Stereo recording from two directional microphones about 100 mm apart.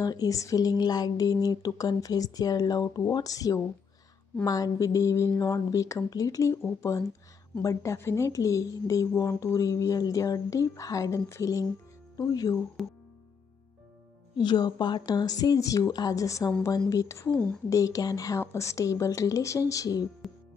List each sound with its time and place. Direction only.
0.0 s a woman's voice: 40° left (ahead or behind)
12.2 s a woman's voice: 40° left (ahead or behind)
12.8 s music: centre (ahead or behind)
14.4 s a woman's voice: 45° left (ahead or behind)